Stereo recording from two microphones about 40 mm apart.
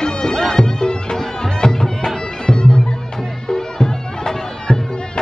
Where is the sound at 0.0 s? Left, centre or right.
Centre.